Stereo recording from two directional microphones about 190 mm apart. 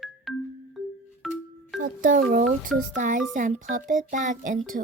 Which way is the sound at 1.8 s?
45° right (ahead or behind).